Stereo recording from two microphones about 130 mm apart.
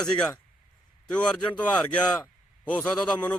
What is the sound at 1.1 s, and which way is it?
A man's voice, 10° left (ahead or behind).